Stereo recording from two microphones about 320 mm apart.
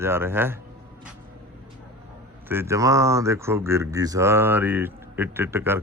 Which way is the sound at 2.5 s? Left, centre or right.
Centre.